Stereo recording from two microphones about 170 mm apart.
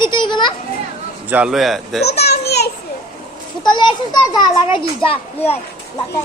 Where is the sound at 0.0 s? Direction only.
25° left (ahead or behind).